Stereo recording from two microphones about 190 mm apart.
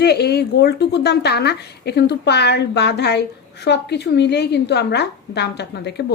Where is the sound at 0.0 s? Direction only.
60° left (ahead or behind).